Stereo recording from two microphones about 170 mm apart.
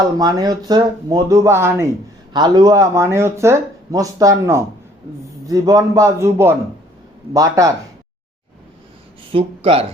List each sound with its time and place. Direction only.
0.0 s speech: 20° right (ahead or behind)
9.3 s speech: 35° right (ahead or behind)